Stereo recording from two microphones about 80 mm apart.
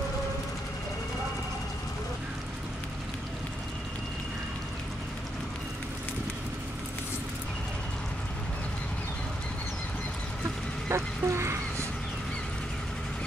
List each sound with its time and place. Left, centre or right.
10.9 s goose: right